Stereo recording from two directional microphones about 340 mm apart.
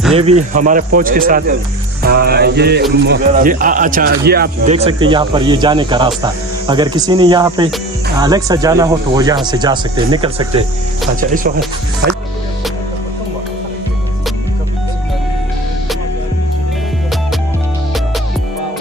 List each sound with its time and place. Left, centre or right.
0.1 s speech: centre